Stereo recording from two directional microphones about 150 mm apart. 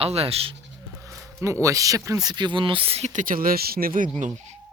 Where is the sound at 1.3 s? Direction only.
20° right (ahead or behind); by 3.2 s 45° right (ahead or behind).